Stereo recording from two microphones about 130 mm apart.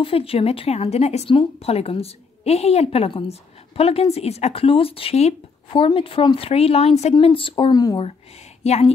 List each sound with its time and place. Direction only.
0.0 s a woman's voice: 45° left (ahead or behind)
7.7 s speech: 30° left (ahead or behind)
8.6 s speech: 55° left (ahead or behind)